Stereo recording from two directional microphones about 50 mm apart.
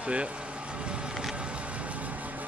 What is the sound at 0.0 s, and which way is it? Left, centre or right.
Speech, right.